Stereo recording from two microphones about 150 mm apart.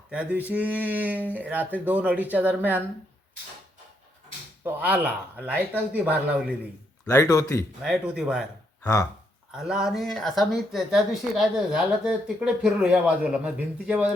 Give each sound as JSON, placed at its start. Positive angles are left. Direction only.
{"t": 0.1, "sound": "speech", "side_deg": -10}
{"t": 4.6, "sound": "speech", "side_deg": -10}
{"t": 7.0, "sound": "speech", "side_deg": 15}
{"t": 7.8, "sound": "speech", "side_deg": -5}
{"t": 8.8, "sound": "speech", "side_deg": 25}
{"t": 9.5, "sound": "speech", "side_deg": -5}